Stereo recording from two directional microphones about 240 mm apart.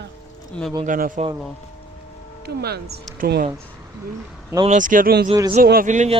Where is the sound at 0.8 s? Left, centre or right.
Right.